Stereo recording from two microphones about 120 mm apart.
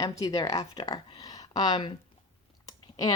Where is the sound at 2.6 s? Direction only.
30° left (ahead or behind).